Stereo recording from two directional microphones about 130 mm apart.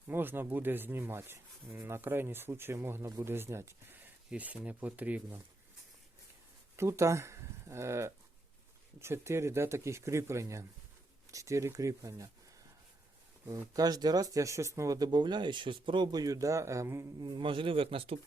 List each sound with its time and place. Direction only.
0.1 s speech: 15° right (ahead or behind)
6.7 s speech: 20° right (ahead or behind)
13.5 s speech: 30° right (ahead or behind)
17.2 s speech: 40° right (ahead or behind)